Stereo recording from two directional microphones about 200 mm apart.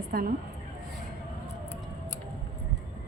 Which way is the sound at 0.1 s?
45° right (ahead or behind).